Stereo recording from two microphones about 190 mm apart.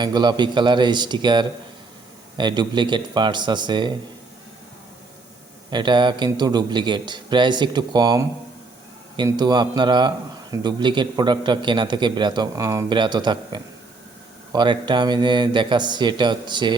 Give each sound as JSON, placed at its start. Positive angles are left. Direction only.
{"t": 0.0, "sound": "a man's voice", "side_deg": -20}
{"t": 5.7, "sound": "a man's voice", "side_deg": -25}